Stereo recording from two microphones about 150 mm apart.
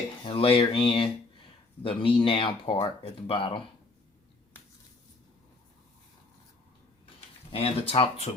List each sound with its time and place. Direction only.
0.3 s speech: 40° left (ahead or behind)
7.5 s speech: 40° left (ahead or behind)